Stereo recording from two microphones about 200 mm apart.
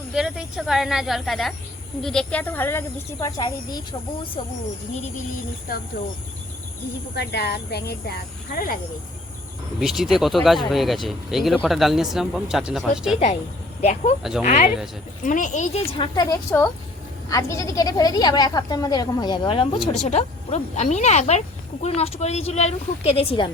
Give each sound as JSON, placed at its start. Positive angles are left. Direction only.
{"t": 0.1, "sound": "speech", "side_deg": -5}
{"t": 5.7, "sound": "speech", "side_deg": 45}
{"t": 7.2, "sound": "speech", "side_deg": 55}
{"t": 9.8, "sound": "speech", "side_deg": 0}
{"t": 13.1, "sound": "speech", "side_deg": 35}
{"t": 14.2, "sound": "speech", "side_deg": 0}
{"t": 14.4, "sound": "a woman's voice", "side_deg": 35}